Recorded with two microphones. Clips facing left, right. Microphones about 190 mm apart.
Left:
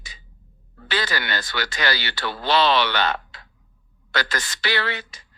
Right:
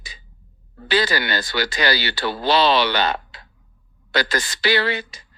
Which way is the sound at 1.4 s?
35° right (ahead or behind).